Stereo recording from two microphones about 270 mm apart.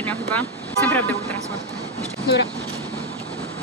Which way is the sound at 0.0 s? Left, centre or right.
Centre.